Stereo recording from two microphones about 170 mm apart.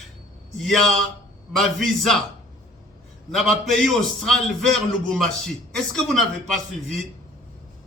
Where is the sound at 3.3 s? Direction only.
Centre (ahead or behind).